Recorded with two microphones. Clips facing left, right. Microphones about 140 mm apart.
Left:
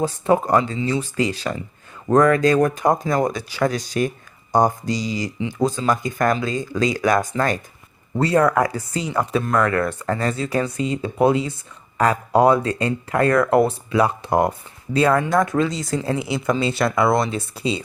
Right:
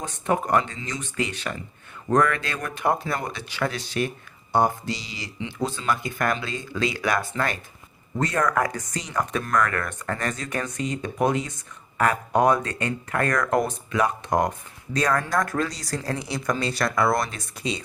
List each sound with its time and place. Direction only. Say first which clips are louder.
0.0 s speech: left 7 dB; 35° left (ahead or behind)
15.9 s speech: left 6 dB; 25° left (ahead or behind)